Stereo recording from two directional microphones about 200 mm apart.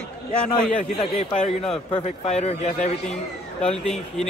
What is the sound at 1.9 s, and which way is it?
Speech, 30° left (ahead or behind).